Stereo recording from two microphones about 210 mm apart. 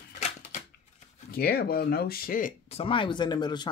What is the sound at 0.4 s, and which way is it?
Shuffling cards, 35° left (ahead or behind).